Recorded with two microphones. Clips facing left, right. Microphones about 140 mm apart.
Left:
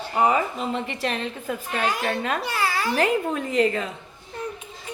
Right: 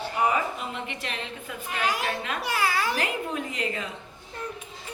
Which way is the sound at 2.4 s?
5° right (ahead or behind).